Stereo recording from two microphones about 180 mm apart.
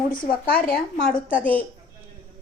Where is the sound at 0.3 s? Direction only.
50° left (ahead or behind).